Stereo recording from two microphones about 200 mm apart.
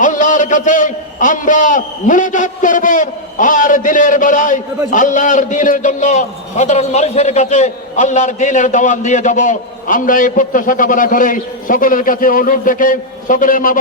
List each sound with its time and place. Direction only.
0.0 s a man's voice: 40° left (ahead or behind)